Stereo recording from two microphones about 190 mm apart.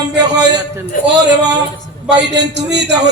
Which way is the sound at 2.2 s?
65° right (ahead or behind).